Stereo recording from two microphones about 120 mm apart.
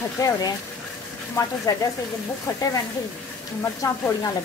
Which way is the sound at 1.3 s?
25° left (ahead or behind).